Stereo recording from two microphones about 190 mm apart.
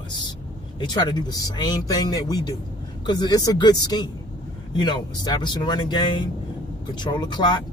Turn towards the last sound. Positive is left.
turn(degrees=25)  # may be behind; listen again after turning